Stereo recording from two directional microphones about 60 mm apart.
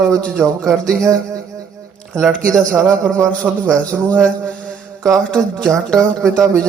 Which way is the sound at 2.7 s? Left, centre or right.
Right.